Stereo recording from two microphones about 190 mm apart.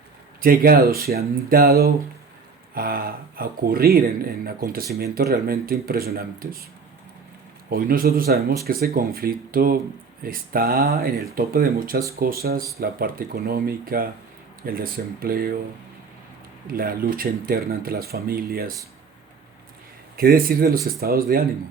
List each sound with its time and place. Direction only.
0.4 s speech: 50° right (ahead or behind)
7.7 s speech: 50° right (ahead or behind)
16.7 s speech: 50° right (ahead or behind)
20.1 s speech: 50° right (ahead or behind)